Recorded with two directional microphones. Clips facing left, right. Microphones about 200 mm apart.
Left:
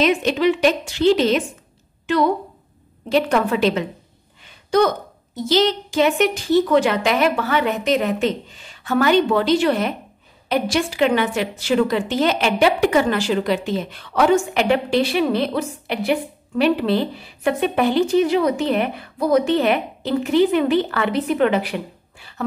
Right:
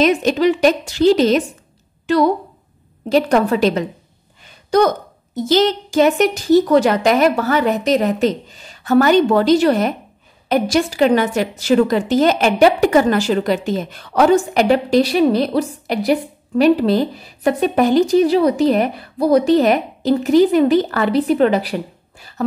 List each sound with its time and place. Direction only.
0.0 s a woman's voice: 40° right (ahead or behind)